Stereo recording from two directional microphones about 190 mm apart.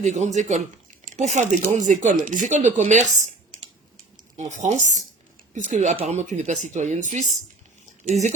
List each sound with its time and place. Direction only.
0.0 s speech: 40° right (ahead or behind)
4.4 s speech: 40° right (ahead or behind)